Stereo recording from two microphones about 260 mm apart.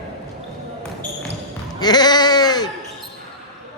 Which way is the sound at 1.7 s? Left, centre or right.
Centre.